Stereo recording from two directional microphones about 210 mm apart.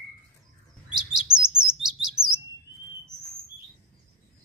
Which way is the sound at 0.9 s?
5° right (ahead or behind).